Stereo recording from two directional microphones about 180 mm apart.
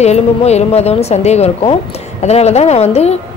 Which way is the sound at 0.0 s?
35° left (ahead or behind).